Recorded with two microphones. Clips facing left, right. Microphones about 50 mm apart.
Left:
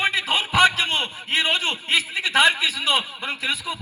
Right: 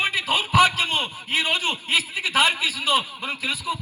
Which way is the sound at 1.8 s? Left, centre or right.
Left.